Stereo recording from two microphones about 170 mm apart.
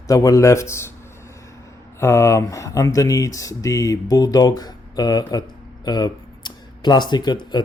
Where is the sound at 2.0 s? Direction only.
15° left (ahead or behind).